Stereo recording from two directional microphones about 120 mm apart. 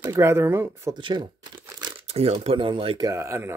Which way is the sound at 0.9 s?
40° right (ahead or behind).